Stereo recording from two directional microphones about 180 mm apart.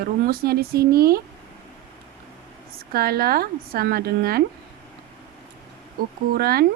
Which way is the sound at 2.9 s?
60° right (ahead or behind).